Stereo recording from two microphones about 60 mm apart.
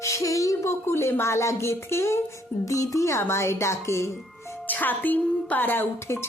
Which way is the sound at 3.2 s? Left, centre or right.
Left.